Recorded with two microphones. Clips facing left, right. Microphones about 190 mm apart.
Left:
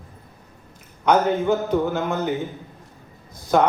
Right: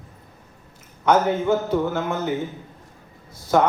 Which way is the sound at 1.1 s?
15° left (ahead or behind).